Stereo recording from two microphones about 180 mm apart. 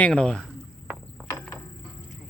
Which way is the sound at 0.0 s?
5° left (ahead or behind).